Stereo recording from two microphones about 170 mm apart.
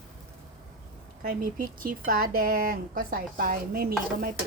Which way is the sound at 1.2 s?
55° right (ahead or behind).